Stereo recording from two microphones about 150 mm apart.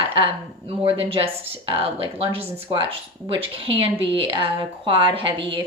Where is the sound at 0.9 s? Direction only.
40° right (ahead or behind).